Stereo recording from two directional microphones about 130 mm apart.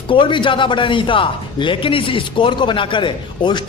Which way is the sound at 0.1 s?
40° left (ahead or behind).